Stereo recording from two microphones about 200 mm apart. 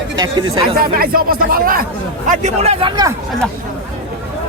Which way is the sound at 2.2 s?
35° right (ahead or behind).